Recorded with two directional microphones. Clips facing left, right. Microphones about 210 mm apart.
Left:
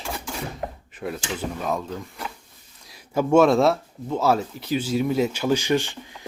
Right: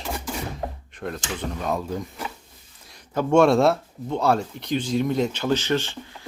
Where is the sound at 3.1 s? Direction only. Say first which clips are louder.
Even; 5° left (ahead or behind).